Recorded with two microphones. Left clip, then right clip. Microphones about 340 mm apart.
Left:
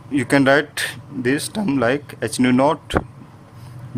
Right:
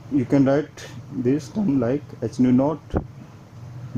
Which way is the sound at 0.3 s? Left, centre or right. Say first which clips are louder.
Left 6 dB; left.